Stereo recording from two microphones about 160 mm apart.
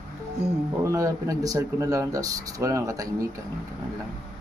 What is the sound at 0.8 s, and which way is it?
Speech, 20° right (ahead or behind).